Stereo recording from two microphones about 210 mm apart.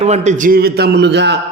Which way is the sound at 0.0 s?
30° right (ahead or behind).